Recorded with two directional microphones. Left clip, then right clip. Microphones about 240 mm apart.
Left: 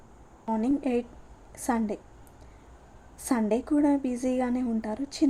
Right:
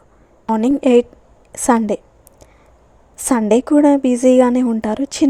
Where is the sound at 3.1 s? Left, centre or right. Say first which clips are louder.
Right 13 dB; right.